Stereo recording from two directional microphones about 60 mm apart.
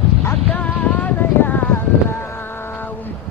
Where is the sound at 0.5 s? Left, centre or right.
Left.